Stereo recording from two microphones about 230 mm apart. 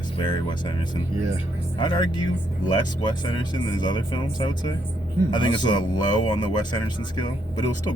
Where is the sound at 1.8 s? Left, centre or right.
Centre.